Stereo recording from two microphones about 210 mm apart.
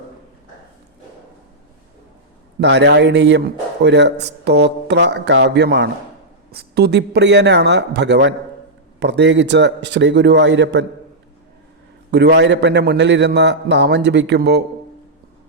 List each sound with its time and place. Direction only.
2.6 s a man's voice: 55° right (ahead or behind)
12.1 s a man's voice: 55° right (ahead or behind)